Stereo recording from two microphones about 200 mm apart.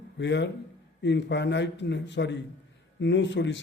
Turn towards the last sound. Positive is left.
turn(degrees=60)  # may be behind; listen again after turning